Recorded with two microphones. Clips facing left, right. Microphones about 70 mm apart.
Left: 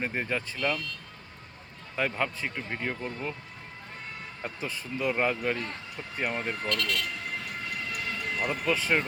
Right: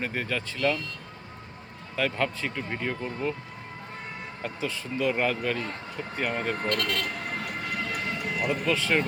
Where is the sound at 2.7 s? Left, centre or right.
Centre.